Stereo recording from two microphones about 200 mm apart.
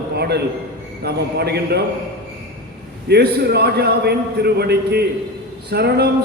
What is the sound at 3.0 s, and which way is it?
A man's voice, 55° right (ahead or behind).